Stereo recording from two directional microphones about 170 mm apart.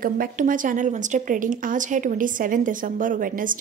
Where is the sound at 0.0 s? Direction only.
55° right (ahead or behind).